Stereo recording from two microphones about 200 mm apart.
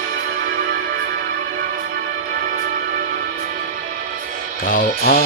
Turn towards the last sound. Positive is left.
turn(degrees=50)  # may be behind; listen again after turning